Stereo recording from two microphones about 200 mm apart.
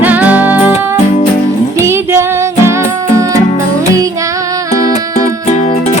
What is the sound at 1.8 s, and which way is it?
Music, 15° right (ahead or behind).